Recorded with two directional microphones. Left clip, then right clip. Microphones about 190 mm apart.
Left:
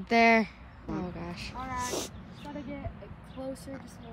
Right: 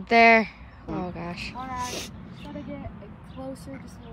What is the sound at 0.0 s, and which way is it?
Speech, 10° left (ahead or behind).